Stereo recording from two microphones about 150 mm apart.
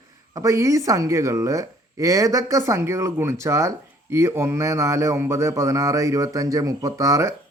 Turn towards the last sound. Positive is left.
turn(degrees=-20)  # may be behind; listen again after turning